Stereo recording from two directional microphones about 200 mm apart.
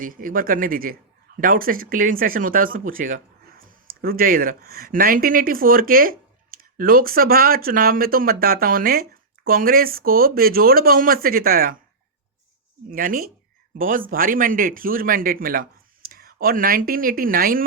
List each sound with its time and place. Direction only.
0.0 s speech: 45° right (ahead or behind)
12.9 s speech: 45° right (ahead or behind)